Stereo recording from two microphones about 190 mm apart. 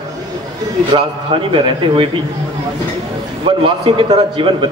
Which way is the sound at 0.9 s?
25° right (ahead or behind).